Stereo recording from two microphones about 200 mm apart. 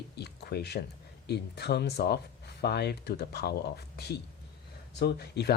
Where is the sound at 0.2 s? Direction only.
55° left (ahead or behind).